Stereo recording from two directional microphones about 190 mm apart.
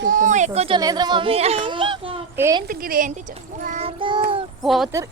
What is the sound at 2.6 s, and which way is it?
A child's voice, 50° right (ahead or behind).